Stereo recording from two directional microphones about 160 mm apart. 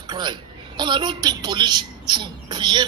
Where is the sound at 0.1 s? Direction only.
25° right (ahead or behind).